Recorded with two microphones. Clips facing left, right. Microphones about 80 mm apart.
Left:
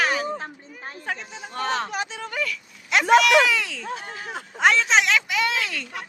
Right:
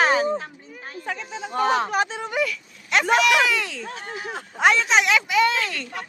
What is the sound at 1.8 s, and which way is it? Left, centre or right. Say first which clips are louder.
Speech: right 6 dB; right.